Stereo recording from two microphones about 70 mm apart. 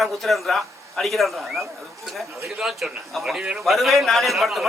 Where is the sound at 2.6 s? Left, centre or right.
Centre.